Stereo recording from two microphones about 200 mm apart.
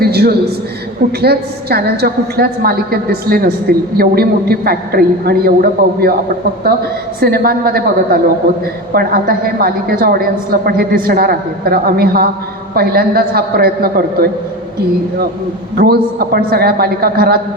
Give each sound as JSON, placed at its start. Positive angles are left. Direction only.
{"t": 0.0, "sound": "a sound", "side_deg": -50}
{"t": 1.2, "sound": "a woman's voice", "side_deg": -55}
{"t": 7.2, "sound": "a woman's voice", "side_deg": -50}
{"t": 15.7, "sound": "a woman's voice", "side_deg": -50}